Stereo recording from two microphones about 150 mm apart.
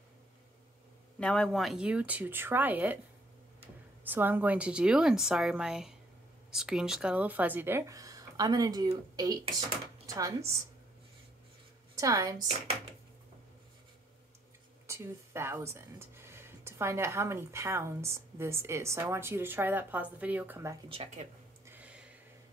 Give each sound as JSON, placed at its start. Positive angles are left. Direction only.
{"t": 1.2, "sound": "speech", "side_deg": 5}
{"t": 4.0, "sound": "speech", "side_deg": -10}
{"t": 12.0, "sound": "speech", "side_deg": -20}
{"t": 14.9, "sound": "speech", "side_deg": -15}
{"t": 20.9, "sound": "speech", "side_deg": -40}
{"t": 21.6, "sound": "a sound", "side_deg": -10}